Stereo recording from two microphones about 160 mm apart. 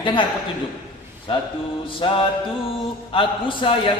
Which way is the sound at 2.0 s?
30° left (ahead or behind).